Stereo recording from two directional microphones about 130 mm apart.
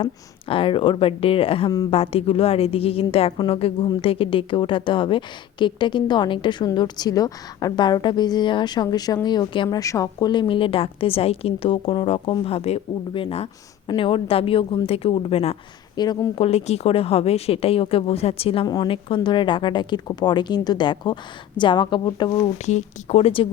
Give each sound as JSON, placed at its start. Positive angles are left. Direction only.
{"t": 0.0, "sound": "a woman's voice", "side_deg": 45}
{"t": 9.6, "sound": "a woman's voice", "side_deg": 25}
{"t": 16.0, "sound": "a woman's voice", "side_deg": 30}
{"t": 16.4, "sound": "a woman's voice", "side_deg": 55}
{"t": 18.6, "sound": "a woman's voice", "side_deg": 35}
{"t": 22.5, "sound": "a woman's voice", "side_deg": 60}